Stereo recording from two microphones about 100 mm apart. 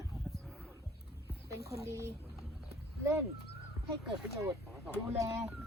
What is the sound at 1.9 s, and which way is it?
Speech, 25° right (ahead or behind).